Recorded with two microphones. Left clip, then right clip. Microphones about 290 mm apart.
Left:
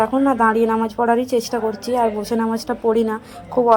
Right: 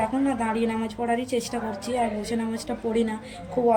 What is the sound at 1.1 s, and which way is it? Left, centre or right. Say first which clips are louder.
A woman's voice: left 8 dB; centre.